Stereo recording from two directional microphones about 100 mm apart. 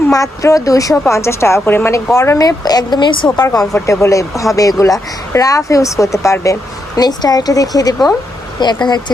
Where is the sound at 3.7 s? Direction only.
30° left (ahead or behind).